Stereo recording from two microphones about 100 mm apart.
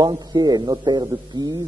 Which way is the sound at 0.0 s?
40° right (ahead or behind).